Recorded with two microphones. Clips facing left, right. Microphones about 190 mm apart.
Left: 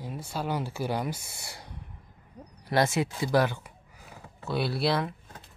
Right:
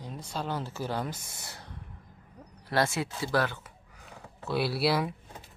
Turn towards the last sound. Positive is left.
turn(degrees=-10)  # may be behind; listen again after turning